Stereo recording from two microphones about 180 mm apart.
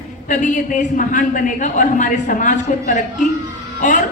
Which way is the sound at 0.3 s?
45° left (ahead or behind).